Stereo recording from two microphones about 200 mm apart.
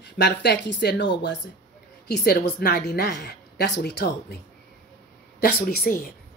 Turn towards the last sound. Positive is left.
turn(degrees=45)  # may be behind; listen again after turning